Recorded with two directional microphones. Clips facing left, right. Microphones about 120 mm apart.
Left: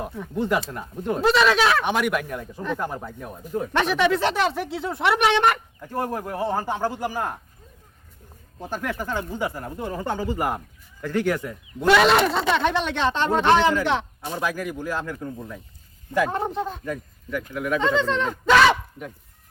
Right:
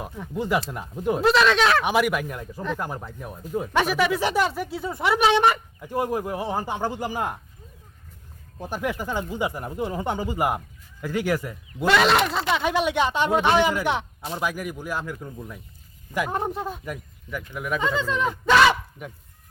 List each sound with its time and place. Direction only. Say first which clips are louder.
0.0 s speech: left 3 dB; 5° right (ahead or behind)
8.6 s speech: right 1 dB; 15° right (ahead or behind)